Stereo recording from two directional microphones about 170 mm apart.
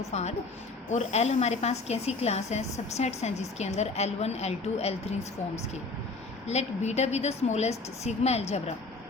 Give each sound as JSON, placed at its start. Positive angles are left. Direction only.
{"t": 0.1, "sound": "a woman's voice", "side_deg": 40}
{"t": 6.5, "sound": "a woman's voice", "side_deg": 40}